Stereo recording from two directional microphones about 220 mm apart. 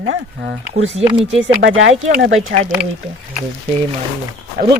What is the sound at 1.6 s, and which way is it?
Speech, 60° right (ahead or behind).